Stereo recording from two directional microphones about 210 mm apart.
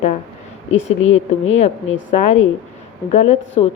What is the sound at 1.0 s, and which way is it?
Speech, 65° left (ahead or behind).